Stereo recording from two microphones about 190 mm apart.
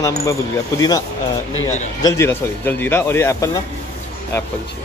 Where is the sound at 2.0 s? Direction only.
15° left (ahead or behind).